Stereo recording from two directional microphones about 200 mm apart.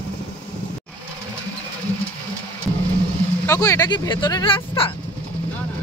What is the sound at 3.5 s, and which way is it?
Speech, 15° left (ahead or behind).